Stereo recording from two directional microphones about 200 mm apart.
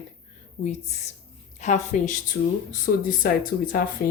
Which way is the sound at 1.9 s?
40° left (ahead or behind).